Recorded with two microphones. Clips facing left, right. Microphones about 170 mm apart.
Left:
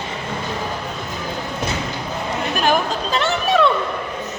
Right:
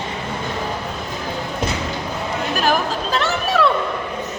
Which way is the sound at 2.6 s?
Centre (ahead or behind).